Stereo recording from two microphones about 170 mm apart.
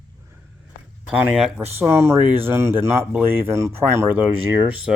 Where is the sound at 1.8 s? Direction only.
15° right (ahead or behind).